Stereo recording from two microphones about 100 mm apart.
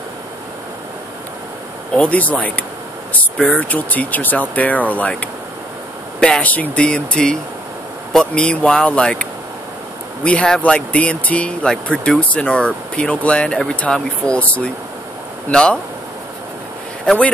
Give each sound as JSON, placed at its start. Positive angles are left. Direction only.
{"t": 2.0, "sound": "speech", "side_deg": 15}
{"t": 17.0, "sound": "speech", "side_deg": 5}